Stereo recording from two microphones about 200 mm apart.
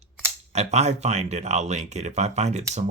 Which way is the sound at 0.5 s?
35° right (ahead or behind).